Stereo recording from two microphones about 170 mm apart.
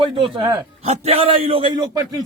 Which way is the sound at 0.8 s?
40° right (ahead or behind).